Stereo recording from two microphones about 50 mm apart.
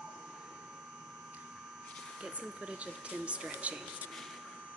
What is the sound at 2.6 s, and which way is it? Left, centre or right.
Speech, right.